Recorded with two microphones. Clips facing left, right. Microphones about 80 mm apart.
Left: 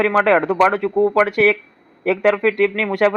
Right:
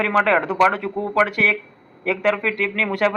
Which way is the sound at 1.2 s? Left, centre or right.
Left.